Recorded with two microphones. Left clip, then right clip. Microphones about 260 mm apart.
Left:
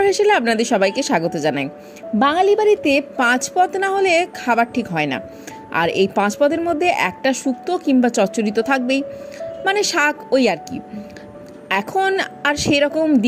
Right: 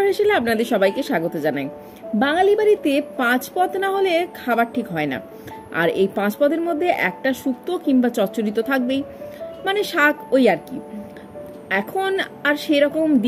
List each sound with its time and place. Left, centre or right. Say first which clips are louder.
0.0 s a woman's voice: left 3 dB; left
11.7 s a woman's voice: left 3 dB; left